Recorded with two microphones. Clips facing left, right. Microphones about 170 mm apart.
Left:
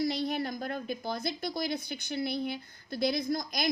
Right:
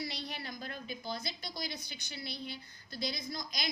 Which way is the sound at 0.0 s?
50° left (ahead or behind).